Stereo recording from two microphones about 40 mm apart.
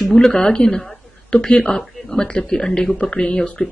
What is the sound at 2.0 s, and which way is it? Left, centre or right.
Speech, centre.